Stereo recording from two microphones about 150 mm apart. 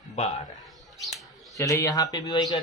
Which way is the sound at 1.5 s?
20° left (ahead or behind).